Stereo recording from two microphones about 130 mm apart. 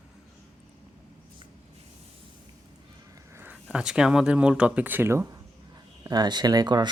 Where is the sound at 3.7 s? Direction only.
5° right (ahead or behind); by 5.4 s 20° right (ahead or behind).